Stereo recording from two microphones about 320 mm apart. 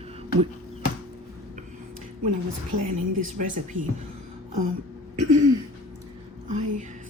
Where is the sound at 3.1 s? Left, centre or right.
Right.